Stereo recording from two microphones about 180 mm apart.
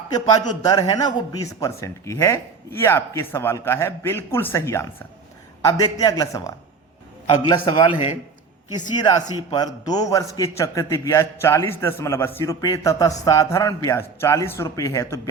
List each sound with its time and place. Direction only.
0.1 s a man's voice: 20° left (ahead or behind)